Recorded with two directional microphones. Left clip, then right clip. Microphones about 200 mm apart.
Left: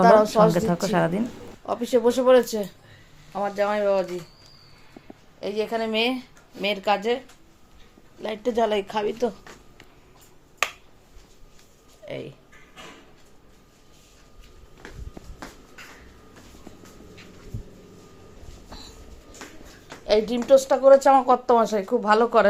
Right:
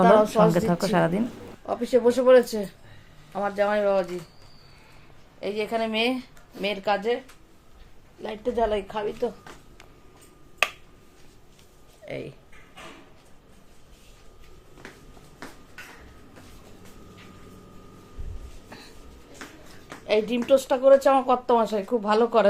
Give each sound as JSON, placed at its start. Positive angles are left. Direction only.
{"t": 0.3, "sound": "a woman's voice", "side_deg": 10}
{"t": 1.6, "sound": "a woman's voice", "side_deg": 10}
{"t": 5.4, "sound": "speech", "side_deg": 5}
{"t": 8.2, "sound": "a woman's voice", "side_deg": 25}
{"t": 12.0, "sound": "speech", "side_deg": 5}
{"t": 20.1, "sound": "speech", "side_deg": 15}